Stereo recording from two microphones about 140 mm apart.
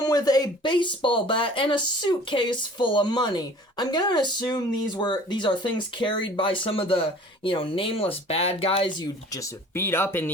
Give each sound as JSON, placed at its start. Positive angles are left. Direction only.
{"t": 0.0, "sound": "speech", "side_deg": 25}
{"t": 9.3, "sound": "speech", "side_deg": 20}